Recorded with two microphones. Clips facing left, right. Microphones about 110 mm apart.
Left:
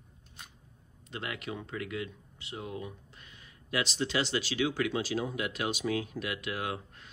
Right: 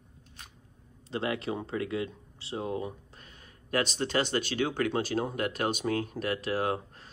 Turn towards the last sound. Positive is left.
turn(degrees=-35)  # may be behind; listen again after turning